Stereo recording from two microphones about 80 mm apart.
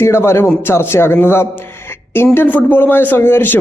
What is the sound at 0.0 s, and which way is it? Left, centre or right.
A man's voice, left.